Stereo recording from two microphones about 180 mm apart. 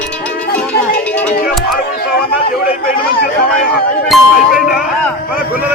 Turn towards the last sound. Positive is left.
turn(degrees=-5)  # may be behind; listen again after turning